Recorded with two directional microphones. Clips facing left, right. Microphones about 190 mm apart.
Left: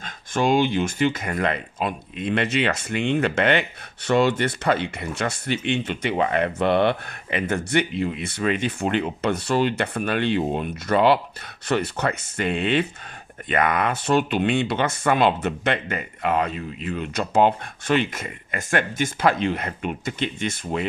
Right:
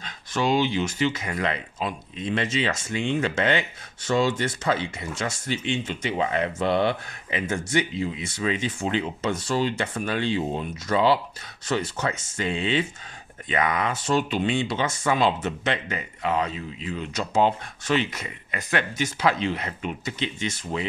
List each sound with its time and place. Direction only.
0.0 s speech: 50° left (ahead or behind)